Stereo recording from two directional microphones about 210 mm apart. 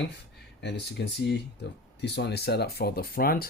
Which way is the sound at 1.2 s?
50° left (ahead or behind).